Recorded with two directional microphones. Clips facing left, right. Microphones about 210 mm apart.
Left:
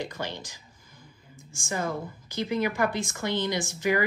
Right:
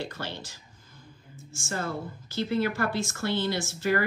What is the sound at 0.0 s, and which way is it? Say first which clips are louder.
Speech: left 2 dB; 15° left (ahead or behind).